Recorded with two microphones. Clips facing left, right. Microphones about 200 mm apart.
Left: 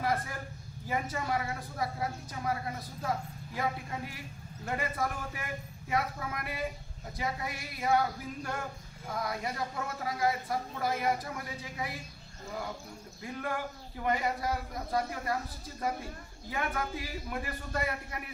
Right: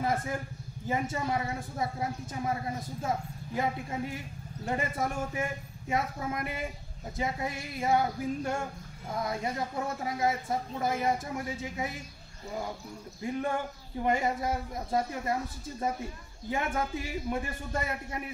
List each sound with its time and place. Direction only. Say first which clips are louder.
0.0 s a sound: right 2 dB; 25° right (ahead or behind)
0.8 s a woman's voice: right 3 dB; 25° right (ahead or behind)
4.6 s a woman's voice: right 2 dB; 25° right (ahead or behind)
13.2 s a woman's voice: right 5 dB; 25° right (ahead or behind)
16.4 s a woman's voice: right 3 dB; 25° right (ahead or behind)